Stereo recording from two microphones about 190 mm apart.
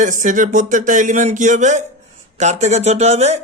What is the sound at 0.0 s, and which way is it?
Speech, 45° right (ahead or behind).